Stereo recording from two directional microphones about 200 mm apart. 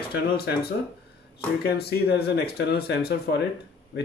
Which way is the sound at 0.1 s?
50° left (ahead or behind).